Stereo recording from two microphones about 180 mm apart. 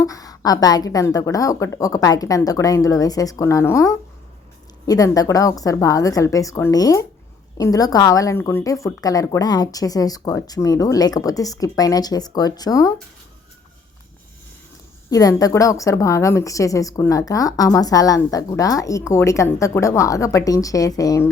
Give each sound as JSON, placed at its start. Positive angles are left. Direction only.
{"t": 0.0, "sound": "speech", "side_deg": 20}
{"t": 15.1, "sound": "a woman's voice", "side_deg": 20}